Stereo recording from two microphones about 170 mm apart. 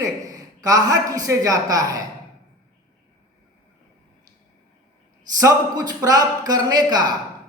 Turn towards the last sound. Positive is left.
turn(degrees=-25)  # may be behind; listen again after turning